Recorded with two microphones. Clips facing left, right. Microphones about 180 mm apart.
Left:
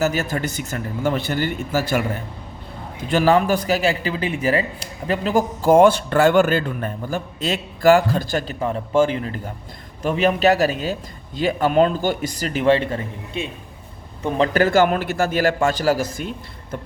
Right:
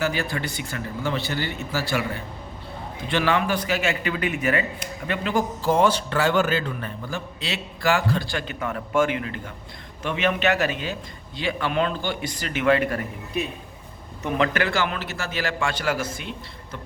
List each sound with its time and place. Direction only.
0.0 s a man's voice: 45° left (ahead or behind)
8.5 s a man's voice: 30° left (ahead or behind)